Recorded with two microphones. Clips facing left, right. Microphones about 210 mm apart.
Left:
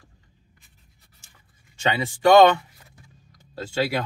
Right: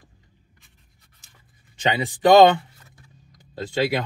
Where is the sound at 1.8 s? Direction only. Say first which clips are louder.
Right 2 dB; 20° right (ahead or behind).